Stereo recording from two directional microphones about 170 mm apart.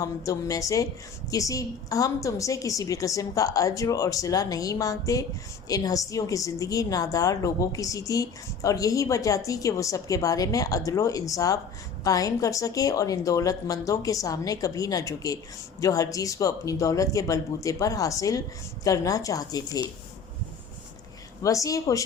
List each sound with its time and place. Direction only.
0.0 s a woman's voice: 20° left (ahead or behind)
21.4 s a woman's voice: 20° left (ahead or behind)